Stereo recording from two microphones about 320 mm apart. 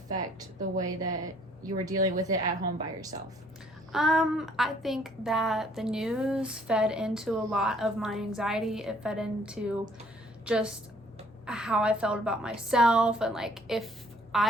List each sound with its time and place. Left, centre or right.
0.8 s a woman's voice: centre
3.9 s a woman's voice: centre